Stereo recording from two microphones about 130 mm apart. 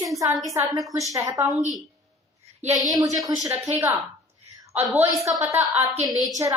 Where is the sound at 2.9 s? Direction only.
30° right (ahead or behind).